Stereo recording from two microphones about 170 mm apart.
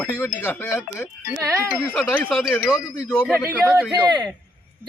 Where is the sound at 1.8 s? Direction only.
10° left (ahead or behind).